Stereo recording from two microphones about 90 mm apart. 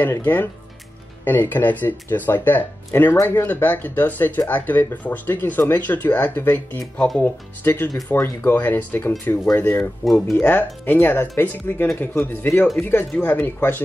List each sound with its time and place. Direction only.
0.0 s speech: 20° left (ahead or behind)
10.0 s speech: centre (ahead or behind)
10.4 s speech: 20° left (ahead or behind)